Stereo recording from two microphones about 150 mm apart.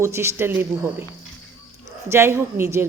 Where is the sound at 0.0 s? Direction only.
15° right (ahead or behind).